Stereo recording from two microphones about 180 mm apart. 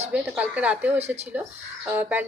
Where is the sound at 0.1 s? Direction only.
5° right (ahead or behind).